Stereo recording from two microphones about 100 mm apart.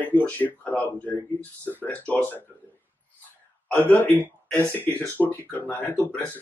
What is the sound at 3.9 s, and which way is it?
Speech, 15° left (ahead or behind).